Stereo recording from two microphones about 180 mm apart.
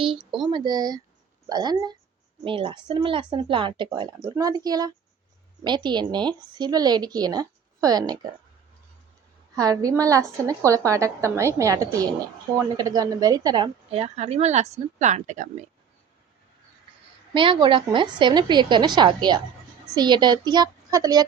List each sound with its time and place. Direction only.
0.0 s a woman's voice: 30° right (ahead or behind)
9.6 s a woman's voice: 20° right (ahead or behind)
13.9 s speech: 35° right (ahead or behind)
17.3 s a woman's voice: 25° right (ahead or behind)